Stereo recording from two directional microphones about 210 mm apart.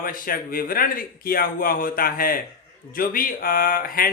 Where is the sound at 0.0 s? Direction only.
45° left (ahead or behind).